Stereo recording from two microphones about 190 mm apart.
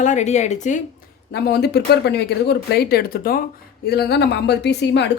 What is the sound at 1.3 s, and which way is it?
Speech, 60° left (ahead or behind).